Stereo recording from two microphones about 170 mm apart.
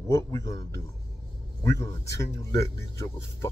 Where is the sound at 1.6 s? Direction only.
20° left (ahead or behind).